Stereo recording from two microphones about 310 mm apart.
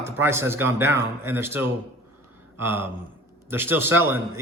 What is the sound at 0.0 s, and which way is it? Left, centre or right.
A man's voice, centre.